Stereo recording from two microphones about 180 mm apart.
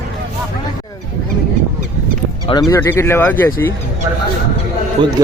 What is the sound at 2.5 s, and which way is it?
Speech, 20° left (ahead or behind).